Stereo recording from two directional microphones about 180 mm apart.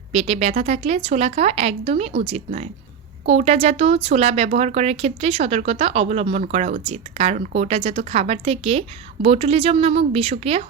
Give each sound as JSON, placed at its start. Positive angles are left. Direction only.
{"t": 0.1, "sound": "speech", "side_deg": -35}